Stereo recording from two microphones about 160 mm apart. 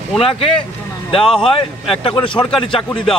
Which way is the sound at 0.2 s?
35° left (ahead or behind).